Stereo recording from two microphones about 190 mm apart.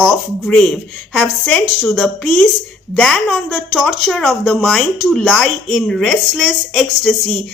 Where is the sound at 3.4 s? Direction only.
Centre (ahead or behind).